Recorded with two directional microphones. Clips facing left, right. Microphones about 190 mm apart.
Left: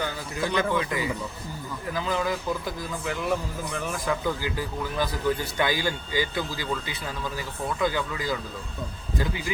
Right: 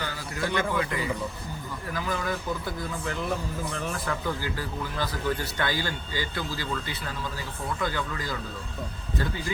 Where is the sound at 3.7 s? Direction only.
15° left (ahead or behind).